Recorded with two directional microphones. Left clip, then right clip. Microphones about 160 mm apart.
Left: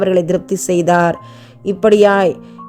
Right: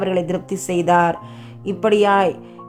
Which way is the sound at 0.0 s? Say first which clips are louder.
Left 7 dB; 25° left (ahead or behind).